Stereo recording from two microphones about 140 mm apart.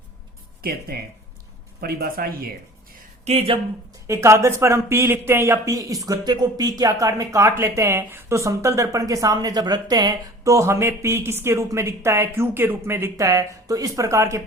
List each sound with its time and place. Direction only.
0.6 s speech: 90° right
1.8 s speech: 90° right
3.2 s speech: 45° right (ahead or behind)
4.0 s speech: 20° right (ahead or behind)